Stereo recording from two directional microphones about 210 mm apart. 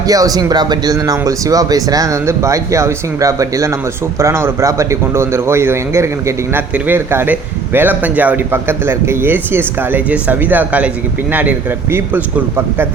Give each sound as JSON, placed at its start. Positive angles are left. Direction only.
{"t": 0.1, "sound": "a man's voice", "side_deg": -15}